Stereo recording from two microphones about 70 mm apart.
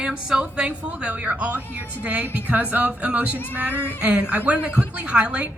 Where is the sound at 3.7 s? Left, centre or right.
Left.